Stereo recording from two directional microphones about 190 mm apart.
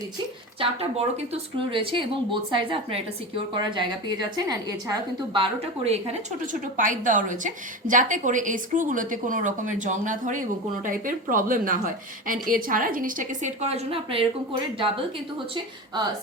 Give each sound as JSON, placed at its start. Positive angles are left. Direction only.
{"t": 0.6, "sound": "a woman's voice", "side_deg": -30}